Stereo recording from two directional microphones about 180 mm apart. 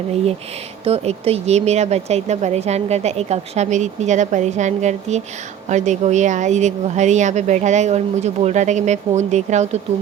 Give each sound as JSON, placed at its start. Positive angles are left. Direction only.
{"t": 0.9, "sound": "speech", "side_deg": -35}